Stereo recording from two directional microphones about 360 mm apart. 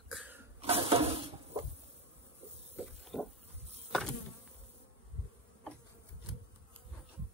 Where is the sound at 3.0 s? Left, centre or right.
Centre.